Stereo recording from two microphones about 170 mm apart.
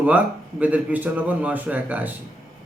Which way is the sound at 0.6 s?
10° right (ahead or behind).